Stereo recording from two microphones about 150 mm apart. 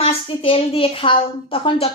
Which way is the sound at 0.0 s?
40° left (ahead or behind).